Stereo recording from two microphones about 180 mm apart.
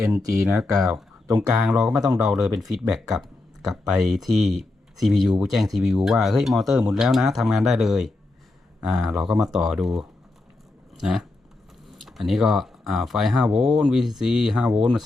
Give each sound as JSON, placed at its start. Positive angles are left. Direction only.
{"t": 0.2, "sound": "speech", "side_deg": -20}
{"t": 0.4, "sound": "speech", "side_deg": -5}